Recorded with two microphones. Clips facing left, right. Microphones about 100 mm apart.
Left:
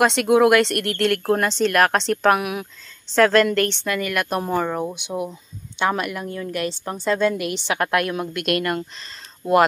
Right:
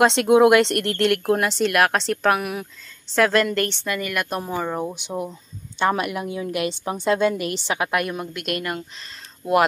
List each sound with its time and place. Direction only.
0.0 s speech: 25° right (ahead or behind)
1.3 s speech: 5° right (ahead or behind)